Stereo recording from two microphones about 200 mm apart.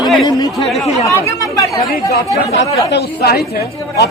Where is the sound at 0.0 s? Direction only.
Centre (ahead or behind).